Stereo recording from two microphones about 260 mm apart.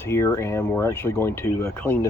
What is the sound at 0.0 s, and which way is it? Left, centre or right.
Speech, centre.